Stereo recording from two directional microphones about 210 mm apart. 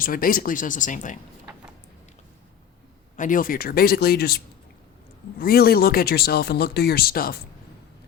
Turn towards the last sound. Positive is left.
turn(degrees=45)  # may be behind; listen again after turning